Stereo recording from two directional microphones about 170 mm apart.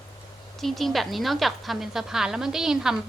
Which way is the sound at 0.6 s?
Centre (ahead or behind).